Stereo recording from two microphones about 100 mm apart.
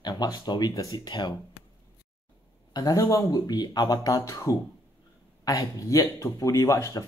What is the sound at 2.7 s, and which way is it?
Speech, 40° left (ahead or behind).